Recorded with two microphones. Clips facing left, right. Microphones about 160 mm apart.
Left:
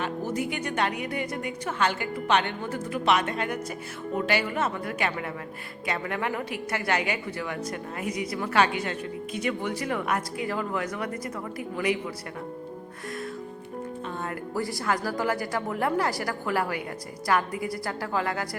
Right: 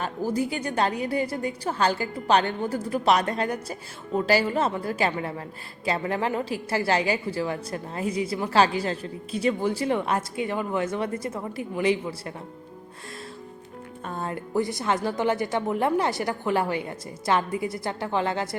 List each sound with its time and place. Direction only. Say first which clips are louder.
0.0 s a woman's voice: right 2 dB; 35° right (ahead or behind)
14.1 s music: right 5 dB; 35° right (ahead or behind)
14.5 s a woman's voice: right 3 dB; 20° right (ahead or behind)